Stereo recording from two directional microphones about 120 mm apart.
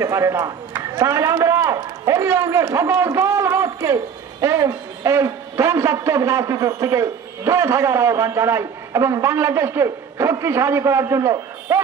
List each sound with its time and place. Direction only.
0.0 s a man's voice: 25° right (ahead or behind)